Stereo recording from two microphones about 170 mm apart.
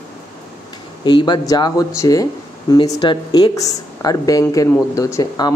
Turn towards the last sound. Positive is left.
turn(degrees=20)  # may be behind; listen again after turning